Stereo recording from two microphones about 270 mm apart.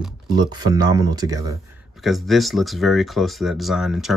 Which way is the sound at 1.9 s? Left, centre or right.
Centre.